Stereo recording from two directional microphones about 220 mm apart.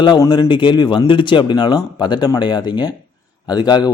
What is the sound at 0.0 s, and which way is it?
Speech, 20° left (ahead or behind).